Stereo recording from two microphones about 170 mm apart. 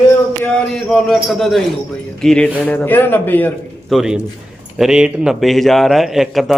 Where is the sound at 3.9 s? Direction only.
5° right (ahead or behind).